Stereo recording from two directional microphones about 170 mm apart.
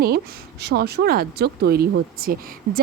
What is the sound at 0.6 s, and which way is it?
A woman's voice, 75° right (ahead or behind).